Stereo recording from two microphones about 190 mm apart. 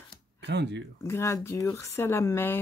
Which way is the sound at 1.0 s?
15° left (ahead or behind).